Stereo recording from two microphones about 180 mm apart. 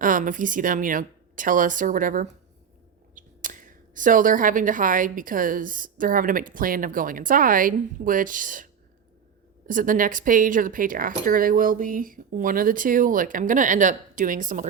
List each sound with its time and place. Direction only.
0.0 s speech: 50° right (ahead or behind)